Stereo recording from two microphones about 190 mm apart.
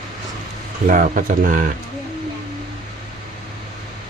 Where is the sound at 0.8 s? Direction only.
45° right (ahead or behind).